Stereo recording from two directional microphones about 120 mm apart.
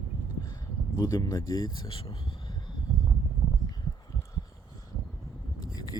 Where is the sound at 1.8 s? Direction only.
45° left (ahead or behind).